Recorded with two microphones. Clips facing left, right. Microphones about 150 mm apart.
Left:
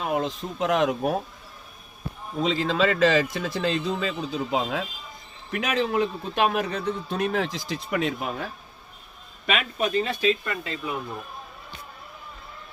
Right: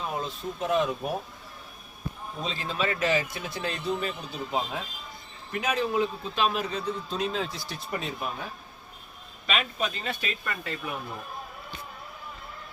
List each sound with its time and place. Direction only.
0.0 s speech: 85° left
2.4 s a man's voice: 90° left
9.5 s a man's voice: 55° left (ahead or behind)
10.0 s speech: 25° left (ahead or behind)